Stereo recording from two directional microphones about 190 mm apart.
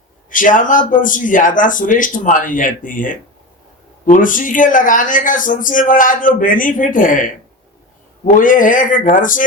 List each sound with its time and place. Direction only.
0.3 s speech: 45° left (ahead or behind)